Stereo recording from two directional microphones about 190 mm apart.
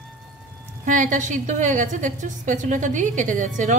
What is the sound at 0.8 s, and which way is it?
A woman's voice, 45° right (ahead or behind).